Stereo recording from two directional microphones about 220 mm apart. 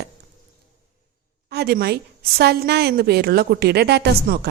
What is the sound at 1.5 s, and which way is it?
A woman's voice, 45° right (ahead or behind).